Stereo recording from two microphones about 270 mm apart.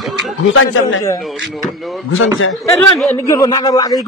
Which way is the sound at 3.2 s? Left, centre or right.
Centre.